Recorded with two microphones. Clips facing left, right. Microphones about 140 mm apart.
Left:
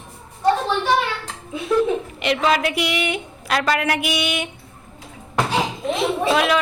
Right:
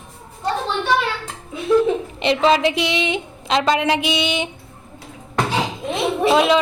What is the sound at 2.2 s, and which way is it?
A woman's voice, 30° right (ahead or behind).